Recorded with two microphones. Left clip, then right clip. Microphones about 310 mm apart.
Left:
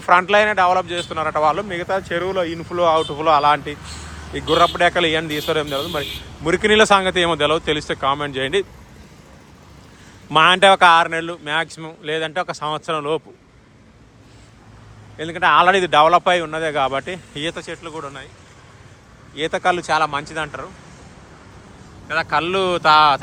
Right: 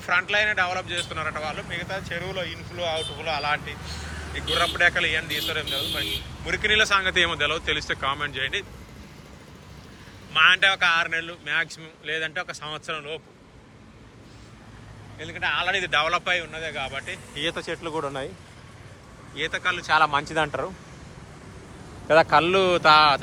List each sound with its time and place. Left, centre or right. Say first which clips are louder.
0.0 s speech: left 8 dB; centre
2.3 s speech: left 10 dB; left
3.2 s a man's voice: left 12 dB; centre
4.5 s speech: left 6 dB; centre
10.4 s speech: left 7 dB; centre
15.2 s speech: left 12 dB; centre
19.4 s speech: left 7 dB; centre
22.0 s speech: right 2 dB; centre